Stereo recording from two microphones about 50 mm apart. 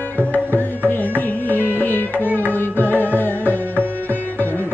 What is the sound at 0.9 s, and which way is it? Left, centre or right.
Music, left.